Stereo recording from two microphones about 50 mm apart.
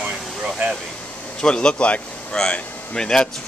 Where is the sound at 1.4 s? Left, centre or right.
Centre.